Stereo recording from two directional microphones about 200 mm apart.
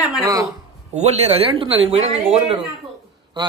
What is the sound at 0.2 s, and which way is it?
Speech, 15° right (ahead or behind).